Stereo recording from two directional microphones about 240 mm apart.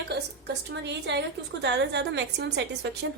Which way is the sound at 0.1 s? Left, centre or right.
Right.